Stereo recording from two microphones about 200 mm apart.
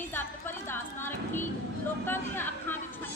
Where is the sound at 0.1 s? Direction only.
10° left (ahead or behind).